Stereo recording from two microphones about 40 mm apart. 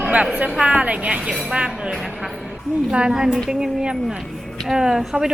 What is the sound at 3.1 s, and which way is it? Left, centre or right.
A woman's voice, centre.